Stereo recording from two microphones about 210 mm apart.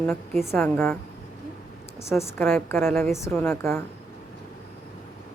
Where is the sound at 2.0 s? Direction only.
10° left (ahead or behind).